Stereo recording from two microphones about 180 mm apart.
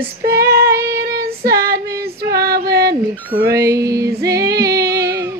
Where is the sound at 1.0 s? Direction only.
55° right (ahead or behind).